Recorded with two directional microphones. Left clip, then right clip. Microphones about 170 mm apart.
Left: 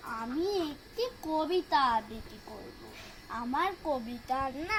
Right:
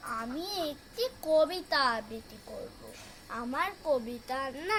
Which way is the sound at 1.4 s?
20° right (ahead or behind).